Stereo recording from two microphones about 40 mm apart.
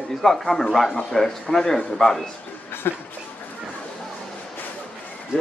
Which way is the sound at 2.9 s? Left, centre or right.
Left.